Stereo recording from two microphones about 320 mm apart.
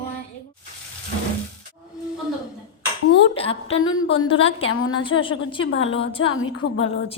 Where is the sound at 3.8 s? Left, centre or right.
Left.